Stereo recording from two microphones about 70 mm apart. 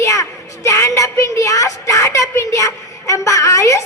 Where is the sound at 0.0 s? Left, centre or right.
Left.